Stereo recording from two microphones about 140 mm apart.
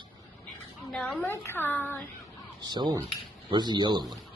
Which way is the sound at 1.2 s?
15° left (ahead or behind).